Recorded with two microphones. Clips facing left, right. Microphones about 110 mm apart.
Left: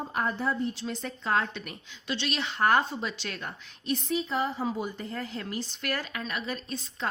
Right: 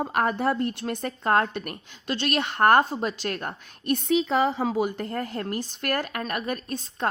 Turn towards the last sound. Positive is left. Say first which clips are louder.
# right 5 dB
turn(degrees=-50)  # may be behind; listen again after turning